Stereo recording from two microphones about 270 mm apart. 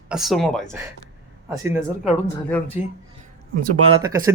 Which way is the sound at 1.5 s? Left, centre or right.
Centre.